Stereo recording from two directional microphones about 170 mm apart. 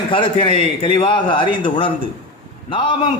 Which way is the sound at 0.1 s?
30° left (ahead or behind).